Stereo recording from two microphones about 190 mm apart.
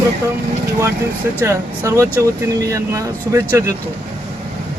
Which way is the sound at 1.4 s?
15° right (ahead or behind).